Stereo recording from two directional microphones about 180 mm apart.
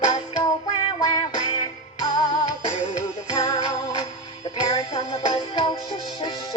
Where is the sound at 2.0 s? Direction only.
20° left (ahead or behind).